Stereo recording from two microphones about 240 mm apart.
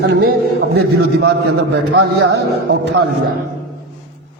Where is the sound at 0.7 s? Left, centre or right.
Right.